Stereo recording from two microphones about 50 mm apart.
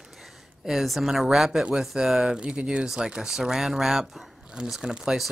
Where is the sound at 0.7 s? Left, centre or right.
Centre.